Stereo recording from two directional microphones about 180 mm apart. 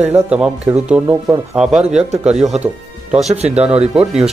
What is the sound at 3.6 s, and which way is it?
Speech, 35° right (ahead or behind).